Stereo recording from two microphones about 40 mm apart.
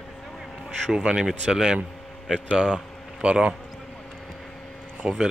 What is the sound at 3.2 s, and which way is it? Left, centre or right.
Speech, right.